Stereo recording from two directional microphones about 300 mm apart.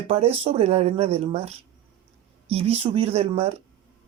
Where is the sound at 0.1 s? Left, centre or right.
Centre.